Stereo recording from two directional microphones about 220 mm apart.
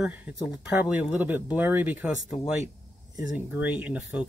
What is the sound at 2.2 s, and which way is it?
Speech, 30° left (ahead or behind).